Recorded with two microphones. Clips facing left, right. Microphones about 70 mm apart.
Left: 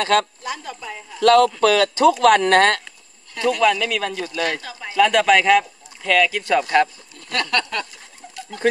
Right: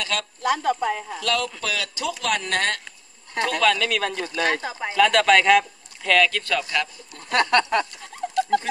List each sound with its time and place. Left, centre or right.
0.0 s speech: left
0.4 s speech: right
1.2 s speech: left
3.6 s speech: centre
4.4 s speech: right
4.9 s speech: centre
6.7 s speech: left
7.3 s speech: right
8.2 s bird: right